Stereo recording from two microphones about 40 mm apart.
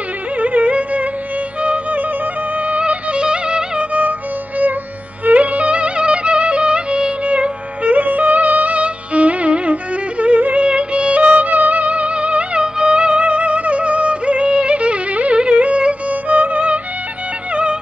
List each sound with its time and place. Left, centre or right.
0.4 s music: right
5.2 s music: right
10.7 s music: right